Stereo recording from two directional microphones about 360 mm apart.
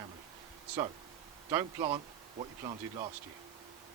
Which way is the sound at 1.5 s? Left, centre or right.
Centre.